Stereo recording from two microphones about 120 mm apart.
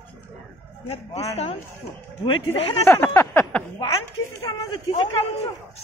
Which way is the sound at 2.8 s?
25° left (ahead or behind).